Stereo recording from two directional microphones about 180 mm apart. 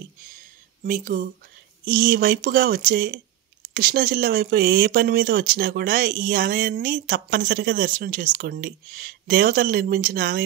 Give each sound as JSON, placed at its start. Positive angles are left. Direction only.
{"t": 0.8, "sound": "speech", "side_deg": -50}